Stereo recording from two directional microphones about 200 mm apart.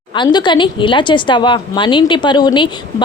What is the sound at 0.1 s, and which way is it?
A woman's voice, 20° left (ahead or behind).